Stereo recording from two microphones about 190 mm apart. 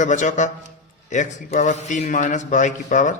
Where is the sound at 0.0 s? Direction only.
40° left (ahead or behind).